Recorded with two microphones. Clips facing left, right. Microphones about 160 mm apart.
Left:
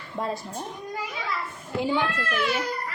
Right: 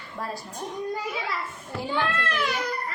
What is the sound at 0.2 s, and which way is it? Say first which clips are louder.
Speech: left 4 dB; 20° left (ahead or behind).